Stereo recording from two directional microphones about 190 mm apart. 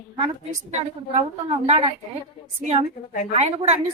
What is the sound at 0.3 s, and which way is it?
A woman's voice, 35° right (ahead or behind).